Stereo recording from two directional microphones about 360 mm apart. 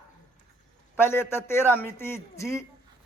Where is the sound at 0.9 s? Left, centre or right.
Centre.